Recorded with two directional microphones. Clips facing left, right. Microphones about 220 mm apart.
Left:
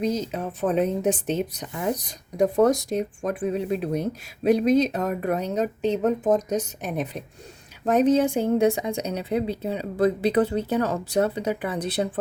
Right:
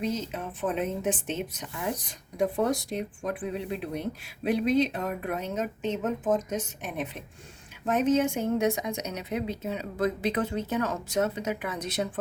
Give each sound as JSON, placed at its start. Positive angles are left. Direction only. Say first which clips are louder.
{"t": 0.0, "sound": "a woman's voice", "louder": "left 5 dB", "side_deg": 40}